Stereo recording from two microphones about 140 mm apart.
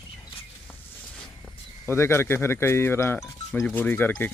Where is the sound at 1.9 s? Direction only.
20° left (ahead or behind).